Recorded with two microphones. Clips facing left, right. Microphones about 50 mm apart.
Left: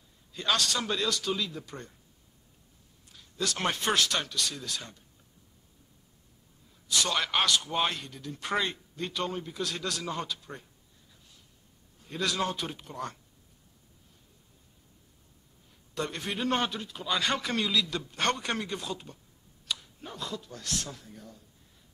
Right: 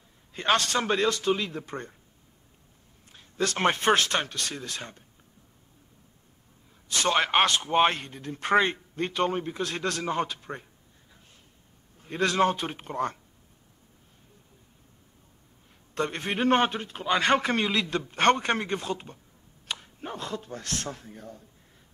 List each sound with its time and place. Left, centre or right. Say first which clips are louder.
0.3 s speech: right 4 dB; right
3.1 s speech: right 5 dB; right
6.9 s speech: right 5 dB; right
12.0 s speech: right 7 dB; right
15.9 s speech: right 4 dB; right